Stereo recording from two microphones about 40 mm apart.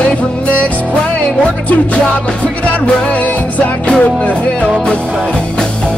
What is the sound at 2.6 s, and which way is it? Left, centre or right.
Music, left.